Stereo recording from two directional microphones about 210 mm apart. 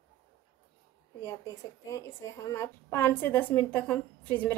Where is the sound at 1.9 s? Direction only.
15° left (ahead or behind).